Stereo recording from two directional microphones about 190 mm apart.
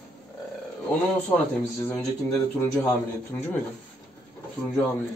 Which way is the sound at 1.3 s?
20° left (ahead or behind).